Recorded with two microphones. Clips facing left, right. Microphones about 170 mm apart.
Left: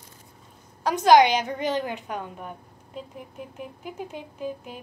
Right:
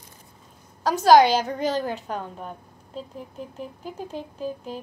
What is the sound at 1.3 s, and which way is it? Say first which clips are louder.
A woman's voice: right 2 dB; 40° right (ahead or behind).